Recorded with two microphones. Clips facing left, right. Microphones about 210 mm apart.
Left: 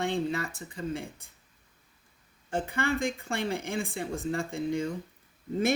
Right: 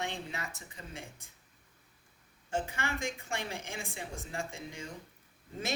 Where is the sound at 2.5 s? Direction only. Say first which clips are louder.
Left 6 dB; 55° left (ahead or behind).